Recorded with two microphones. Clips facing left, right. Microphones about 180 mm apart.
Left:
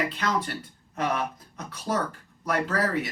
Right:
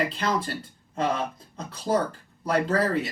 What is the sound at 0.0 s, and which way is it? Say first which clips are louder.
Speech: right 1 dB; 30° right (ahead or behind).